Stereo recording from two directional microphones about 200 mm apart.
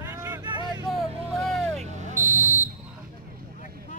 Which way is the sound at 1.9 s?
35° right (ahead or behind).